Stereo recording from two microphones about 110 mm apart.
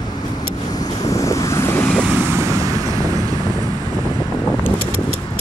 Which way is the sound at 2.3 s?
25° right (ahead or behind).